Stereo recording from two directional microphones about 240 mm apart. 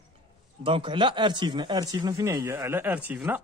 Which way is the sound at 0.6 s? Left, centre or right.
Right.